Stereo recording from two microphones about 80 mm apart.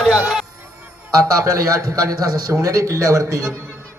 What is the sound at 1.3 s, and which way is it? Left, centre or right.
A man's voice, right.